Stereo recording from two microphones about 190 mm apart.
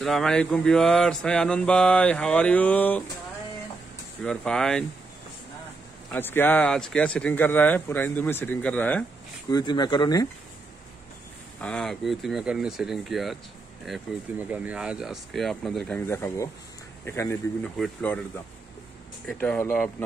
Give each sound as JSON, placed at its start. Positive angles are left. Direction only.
{"t": 0.0, "sound": "mantra", "side_deg": 0}
{"t": 4.2, "sound": "mantra", "side_deg": 5}
{"t": 6.1, "sound": "speech", "side_deg": 10}
{"t": 9.5, "sound": "speech", "side_deg": 20}
{"t": 11.6, "sound": "mantra", "side_deg": 5}
{"t": 14.5, "sound": "mantra", "side_deg": -10}
{"t": 16.1, "sound": "speech", "side_deg": 15}
{"t": 17.7, "sound": "mantra", "side_deg": 5}
{"t": 19.2, "sound": "speech", "side_deg": 5}